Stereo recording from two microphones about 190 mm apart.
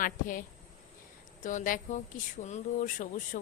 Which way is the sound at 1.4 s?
45° left (ahead or behind).